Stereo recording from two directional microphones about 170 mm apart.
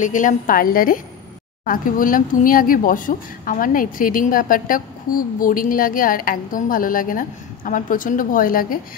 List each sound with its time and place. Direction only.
0.0 s speech: 50° left (ahead or behind)